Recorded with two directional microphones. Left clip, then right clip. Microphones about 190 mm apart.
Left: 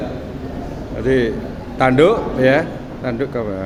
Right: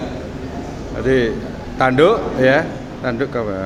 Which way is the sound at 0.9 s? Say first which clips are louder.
Right 1 dB; 10° left (ahead or behind).